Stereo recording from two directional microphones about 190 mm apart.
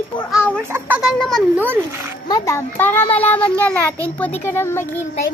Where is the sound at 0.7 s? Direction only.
10° right (ahead or behind).